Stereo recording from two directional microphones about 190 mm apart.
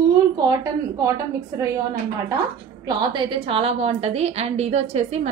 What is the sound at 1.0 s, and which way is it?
Speech, 15° right (ahead or behind).